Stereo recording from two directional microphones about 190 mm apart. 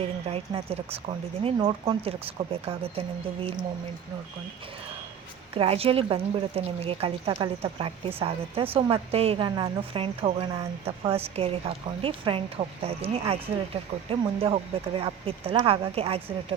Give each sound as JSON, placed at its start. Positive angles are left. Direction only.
{"t": 0.0, "sound": "speech", "side_deg": -30}
{"t": 5.5, "sound": "a woman's voice", "side_deg": -30}
{"t": 11.1, "sound": "a woman's voice", "side_deg": -30}